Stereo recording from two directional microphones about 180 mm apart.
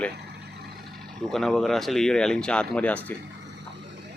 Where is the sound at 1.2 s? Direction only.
Centre (ahead or behind).